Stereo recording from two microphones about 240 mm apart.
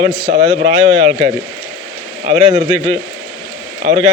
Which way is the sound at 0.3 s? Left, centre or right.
Right.